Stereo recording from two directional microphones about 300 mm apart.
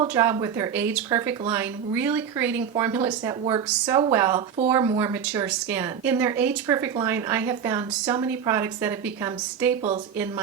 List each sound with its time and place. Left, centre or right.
0.0 s speech: centre